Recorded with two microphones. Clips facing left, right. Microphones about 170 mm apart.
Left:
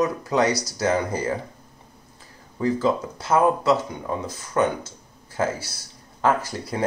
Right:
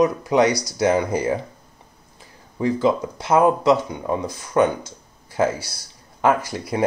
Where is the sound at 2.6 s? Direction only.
15° right (ahead or behind).